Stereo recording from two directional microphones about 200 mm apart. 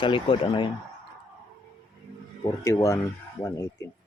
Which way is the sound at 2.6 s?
15° left (ahead or behind).